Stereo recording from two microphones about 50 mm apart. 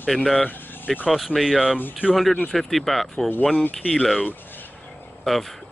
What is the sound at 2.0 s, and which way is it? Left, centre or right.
Speech, left.